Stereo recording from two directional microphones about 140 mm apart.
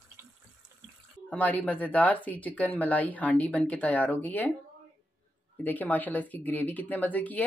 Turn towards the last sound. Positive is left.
turn(degrees=10)  # may be behind; listen again after turning